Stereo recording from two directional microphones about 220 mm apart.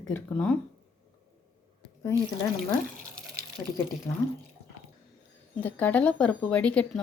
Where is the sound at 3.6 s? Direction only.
15° left (ahead or behind).